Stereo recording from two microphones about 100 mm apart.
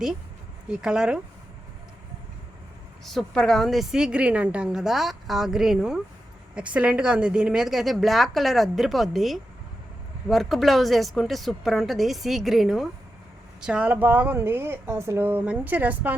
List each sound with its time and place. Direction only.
0.7 s speech: 10° right (ahead or behind)
3.0 s a woman's voice: centre (ahead or behind); by 16.1 s 15° right (ahead or behind)